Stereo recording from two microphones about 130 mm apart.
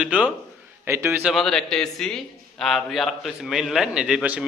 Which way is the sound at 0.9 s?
20° right (ahead or behind).